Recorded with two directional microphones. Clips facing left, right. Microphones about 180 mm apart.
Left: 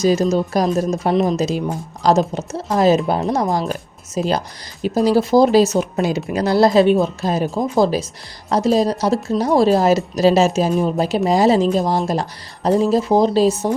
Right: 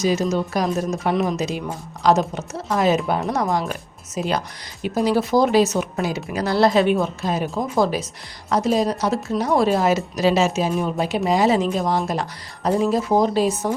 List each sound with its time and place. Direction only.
0.0 s speech: 35° left (ahead or behind)
3.2 s speech: 20° left (ahead or behind)
3.5 s speech: 35° left (ahead or behind)